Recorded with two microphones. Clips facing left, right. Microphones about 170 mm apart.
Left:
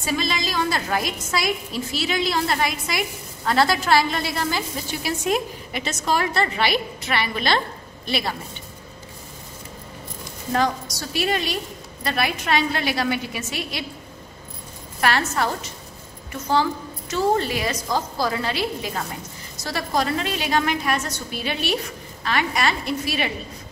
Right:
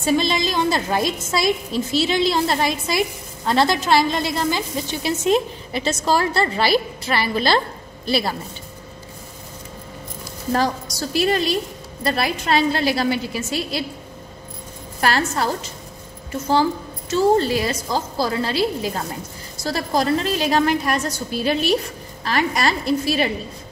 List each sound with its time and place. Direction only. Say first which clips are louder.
0.2 s a woman's voice: right 4 dB; 25° right (ahead or behind)
11.1 s a woman's voice: right 5 dB; 35° right (ahead or behind)
15.0 s a woman's voice: right 1 dB; 35° right (ahead or behind)
17.1 s a woman's voice: right 5 dB; 35° right (ahead or behind)